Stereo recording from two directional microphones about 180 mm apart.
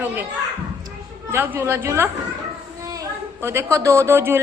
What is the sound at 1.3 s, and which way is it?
A woman's voice, 10° right (ahead or behind).